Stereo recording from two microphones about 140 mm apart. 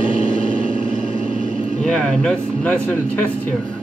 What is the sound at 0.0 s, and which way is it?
Vehicle, 70° right (ahead or behind).